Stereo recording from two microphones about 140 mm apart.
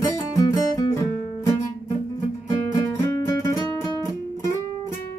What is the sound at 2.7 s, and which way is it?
Guitar, 25° left (ahead or behind).